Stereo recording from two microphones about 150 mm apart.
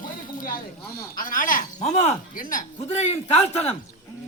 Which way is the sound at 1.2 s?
65° left (ahead or behind).